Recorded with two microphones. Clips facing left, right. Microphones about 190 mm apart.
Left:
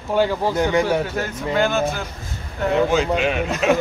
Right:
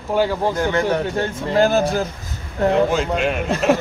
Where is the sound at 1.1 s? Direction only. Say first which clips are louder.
Right 3 dB; 30° right (ahead or behind).